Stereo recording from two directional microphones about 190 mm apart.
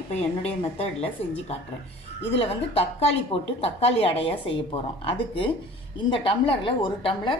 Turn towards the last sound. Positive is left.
turn(degrees=30)  # may be behind; listen again after turning